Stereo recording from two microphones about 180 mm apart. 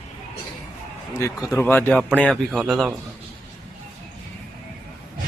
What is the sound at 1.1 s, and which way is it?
Speech, 15° left (ahead or behind).